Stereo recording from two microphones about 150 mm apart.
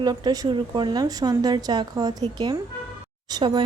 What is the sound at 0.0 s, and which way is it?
Speech, 25° right (ahead or behind).